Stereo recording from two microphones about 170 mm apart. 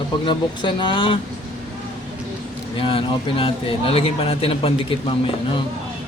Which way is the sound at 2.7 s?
30° left (ahead or behind).